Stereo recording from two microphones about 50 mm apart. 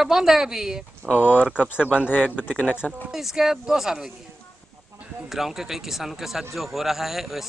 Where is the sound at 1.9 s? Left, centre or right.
Centre.